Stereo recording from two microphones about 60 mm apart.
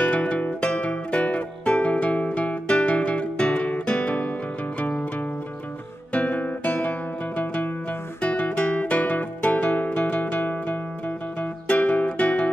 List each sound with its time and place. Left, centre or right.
0.0 s music: left
6.1 s music: left